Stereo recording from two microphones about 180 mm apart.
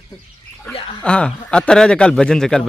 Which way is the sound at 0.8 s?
30° left (ahead or behind).